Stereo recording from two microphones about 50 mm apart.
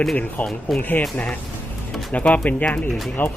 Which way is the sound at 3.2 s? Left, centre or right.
Left.